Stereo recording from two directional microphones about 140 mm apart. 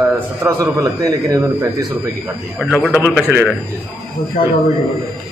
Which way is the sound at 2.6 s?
10° left (ahead or behind).